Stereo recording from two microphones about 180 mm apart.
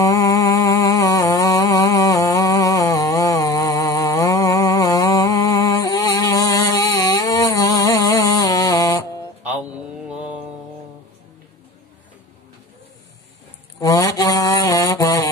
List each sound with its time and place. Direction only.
0.0 s a sound: 20° left (ahead or behind)
9.4 s mantra: 5° right (ahead or behind)
13.7 s mantra: 20° left (ahead or behind)